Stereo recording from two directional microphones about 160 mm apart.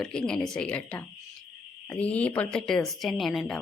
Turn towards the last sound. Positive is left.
turn(degrees=0)  # may be behind; listen again after turning